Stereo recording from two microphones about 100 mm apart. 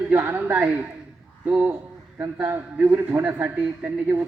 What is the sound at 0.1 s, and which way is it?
A man's voice, 20° right (ahead or behind).